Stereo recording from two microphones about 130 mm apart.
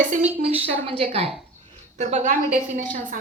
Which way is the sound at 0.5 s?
50° right (ahead or behind).